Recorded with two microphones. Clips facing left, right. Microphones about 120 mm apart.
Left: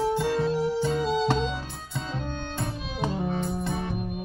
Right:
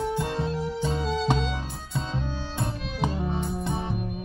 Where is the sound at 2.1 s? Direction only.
15° right (ahead or behind).